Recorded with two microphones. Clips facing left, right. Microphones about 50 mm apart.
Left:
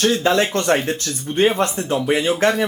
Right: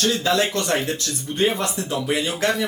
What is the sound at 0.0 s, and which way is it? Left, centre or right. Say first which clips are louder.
Speech: left 3 dB; left.